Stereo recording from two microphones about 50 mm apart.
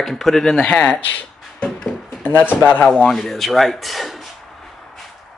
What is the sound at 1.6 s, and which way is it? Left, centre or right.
Music, centre.